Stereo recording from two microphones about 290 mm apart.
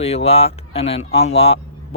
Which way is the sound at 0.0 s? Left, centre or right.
Left.